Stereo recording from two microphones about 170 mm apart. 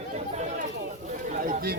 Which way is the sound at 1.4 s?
60° right (ahead or behind).